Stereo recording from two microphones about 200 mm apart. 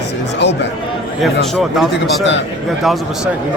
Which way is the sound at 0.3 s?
60° left (ahead or behind).